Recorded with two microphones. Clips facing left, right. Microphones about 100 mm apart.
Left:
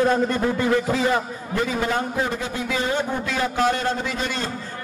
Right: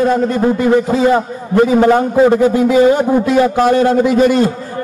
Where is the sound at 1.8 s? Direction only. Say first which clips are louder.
Right 14 dB; 55° right (ahead or behind).